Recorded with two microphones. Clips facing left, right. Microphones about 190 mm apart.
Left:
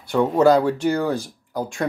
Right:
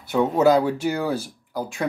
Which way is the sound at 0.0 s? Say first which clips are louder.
Left 2 dB; 5° right (ahead or behind).